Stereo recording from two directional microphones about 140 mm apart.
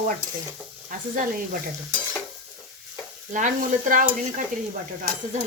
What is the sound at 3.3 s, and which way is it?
Stir, 65° right (ahead or behind).